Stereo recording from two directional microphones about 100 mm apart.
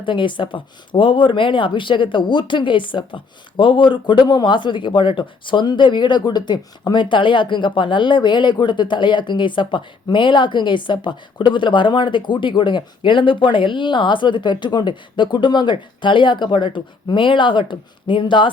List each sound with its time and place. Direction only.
0.0 s speech: 55° left (ahead or behind)